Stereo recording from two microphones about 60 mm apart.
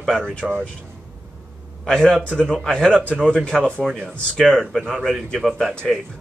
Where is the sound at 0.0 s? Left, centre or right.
Centre.